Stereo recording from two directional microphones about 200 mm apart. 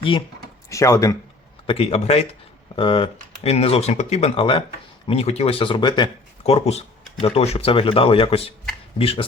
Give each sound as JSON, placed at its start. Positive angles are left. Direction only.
{"t": 0.7, "sound": "speech", "side_deg": 15}
{"t": 1.6, "sound": "speech", "side_deg": 30}